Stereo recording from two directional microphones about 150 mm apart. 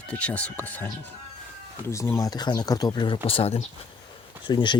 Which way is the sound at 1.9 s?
20° left (ahead or behind).